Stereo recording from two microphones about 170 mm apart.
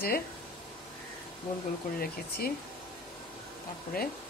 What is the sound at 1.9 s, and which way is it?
Speech, 60° left (ahead or behind).